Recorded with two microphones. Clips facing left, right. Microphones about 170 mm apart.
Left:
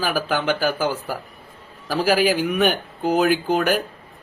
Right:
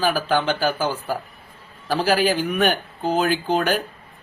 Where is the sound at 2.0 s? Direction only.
10° left (ahead or behind).